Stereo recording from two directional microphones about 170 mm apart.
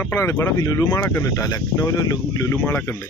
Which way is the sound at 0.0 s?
15° left (ahead or behind).